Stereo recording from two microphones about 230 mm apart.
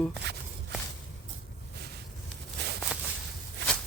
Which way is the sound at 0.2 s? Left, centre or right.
Right.